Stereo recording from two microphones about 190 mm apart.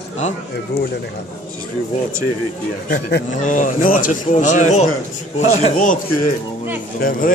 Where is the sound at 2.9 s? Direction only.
45° left (ahead or behind).